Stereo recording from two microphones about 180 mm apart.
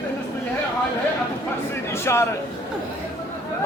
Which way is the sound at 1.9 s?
15° left (ahead or behind).